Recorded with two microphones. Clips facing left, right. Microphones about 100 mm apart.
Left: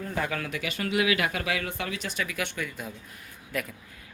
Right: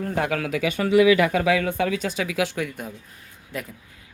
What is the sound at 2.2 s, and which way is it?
Speech, 90° right.